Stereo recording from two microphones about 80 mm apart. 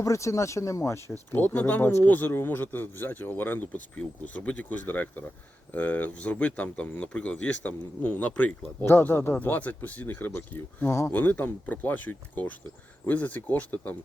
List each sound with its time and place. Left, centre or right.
0.0 s speech: left
1.4 s speech: left
8.8 s speech: left